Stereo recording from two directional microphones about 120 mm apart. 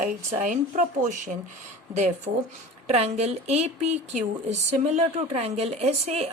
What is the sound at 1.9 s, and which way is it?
Speech, 75° right (ahead or behind).